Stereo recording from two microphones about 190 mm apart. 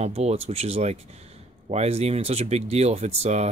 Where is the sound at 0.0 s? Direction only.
35° right (ahead or behind).